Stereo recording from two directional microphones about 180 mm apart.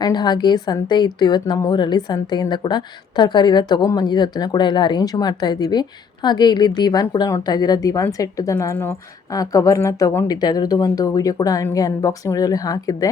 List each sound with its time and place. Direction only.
0.0 s a woman's voice: 20° left (ahead or behind)